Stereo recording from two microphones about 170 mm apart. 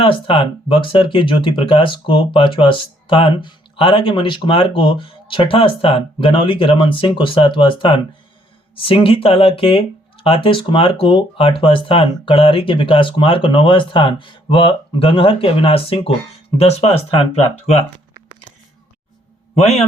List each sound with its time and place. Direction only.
0.0 s speech: 30° left (ahead or behind)
19.5 s speech: 40° left (ahead or behind)